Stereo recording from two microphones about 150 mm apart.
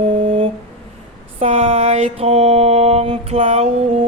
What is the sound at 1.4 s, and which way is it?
Mantra, 45° right (ahead or behind).